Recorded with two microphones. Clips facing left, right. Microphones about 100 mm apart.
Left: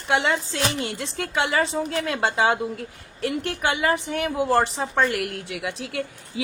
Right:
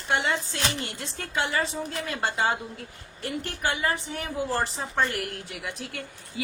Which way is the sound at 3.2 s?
70° left (ahead or behind).